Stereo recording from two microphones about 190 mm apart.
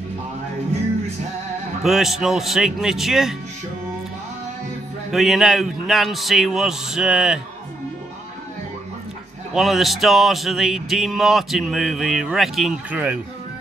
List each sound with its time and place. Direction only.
1.8 s speech: centre (ahead or behind)
5.1 s speech: centre (ahead or behind)
9.5 s speech: centre (ahead or behind)